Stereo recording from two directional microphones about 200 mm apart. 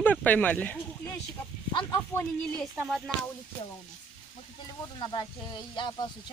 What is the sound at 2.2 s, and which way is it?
Speech, 10° left (ahead or behind).